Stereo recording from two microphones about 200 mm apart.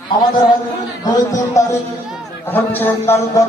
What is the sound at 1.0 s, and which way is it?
A man's voice, 15° left (ahead or behind).